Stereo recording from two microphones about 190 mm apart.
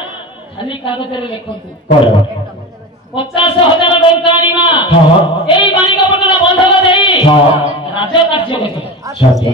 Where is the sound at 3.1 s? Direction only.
25° left (ahead or behind).